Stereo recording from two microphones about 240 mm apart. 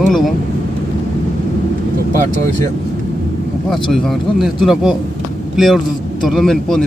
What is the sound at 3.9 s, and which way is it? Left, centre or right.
Speech, centre.